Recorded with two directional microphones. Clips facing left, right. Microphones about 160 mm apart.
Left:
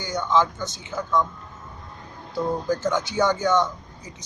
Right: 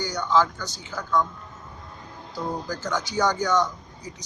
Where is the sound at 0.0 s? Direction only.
25° left (ahead or behind).